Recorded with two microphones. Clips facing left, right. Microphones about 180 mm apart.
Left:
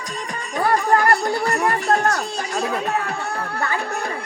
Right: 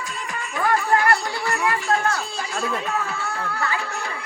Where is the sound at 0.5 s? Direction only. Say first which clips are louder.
Left 3 dB; 40° left (ahead or behind).